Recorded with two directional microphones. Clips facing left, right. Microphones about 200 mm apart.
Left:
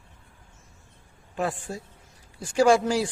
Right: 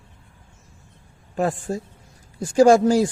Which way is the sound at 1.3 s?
45° right (ahead or behind).